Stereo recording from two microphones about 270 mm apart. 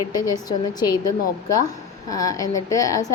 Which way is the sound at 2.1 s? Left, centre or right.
Centre.